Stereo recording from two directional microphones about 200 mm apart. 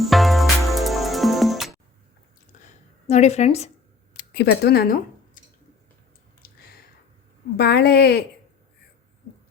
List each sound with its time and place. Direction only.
0.0 s music: centre (ahead or behind)
3.1 s a woman's voice: 35° left (ahead or behind)
4.4 s speech: 55° left (ahead or behind)
6.4 s a sound: 50° left (ahead or behind)
7.5 s a woman's voice: 55° left (ahead or behind)